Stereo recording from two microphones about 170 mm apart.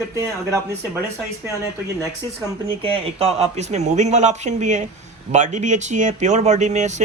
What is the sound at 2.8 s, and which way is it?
A man's voice, 35° right (ahead or behind).